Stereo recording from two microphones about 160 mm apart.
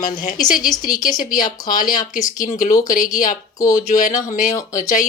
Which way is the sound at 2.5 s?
50° left (ahead or behind).